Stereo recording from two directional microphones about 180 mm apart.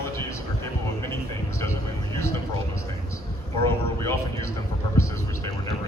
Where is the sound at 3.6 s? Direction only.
15° left (ahead or behind).